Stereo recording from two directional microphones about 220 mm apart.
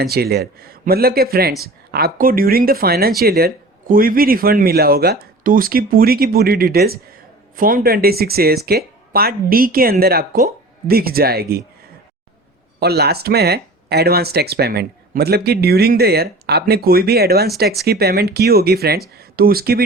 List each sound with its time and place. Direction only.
0.0 s speech: 45° right (ahead or behind)
12.8 s speech: 45° right (ahead or behind)